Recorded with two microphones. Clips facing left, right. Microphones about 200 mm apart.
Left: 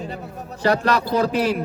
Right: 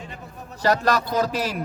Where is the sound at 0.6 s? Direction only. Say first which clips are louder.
Left 2 dB; 40° right (ahead or behind).